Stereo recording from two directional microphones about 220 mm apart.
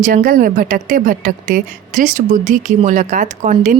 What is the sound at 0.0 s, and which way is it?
Speech, 40° right (ahead or behind).